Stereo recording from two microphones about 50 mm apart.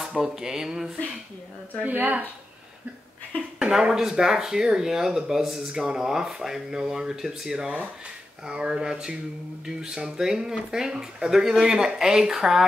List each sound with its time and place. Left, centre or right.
0.2 s speech: centre
1.8 s speech: right
3.5 s a sound: centre
3.9 s speech: centre